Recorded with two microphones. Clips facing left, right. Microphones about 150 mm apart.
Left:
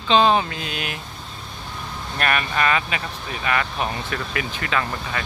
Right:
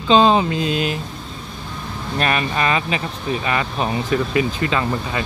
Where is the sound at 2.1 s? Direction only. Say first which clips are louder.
Right 2 dB; 25° right (ahead or behind).